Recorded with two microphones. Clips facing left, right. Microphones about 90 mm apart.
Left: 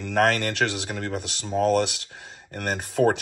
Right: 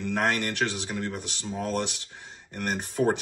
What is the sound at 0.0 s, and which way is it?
Speech, 75° left (ahead or behind).